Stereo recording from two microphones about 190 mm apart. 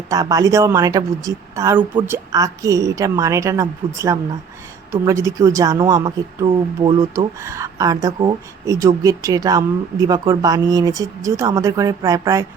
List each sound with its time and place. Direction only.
0.1 s a woman's voice: 20° right (ahead or behind)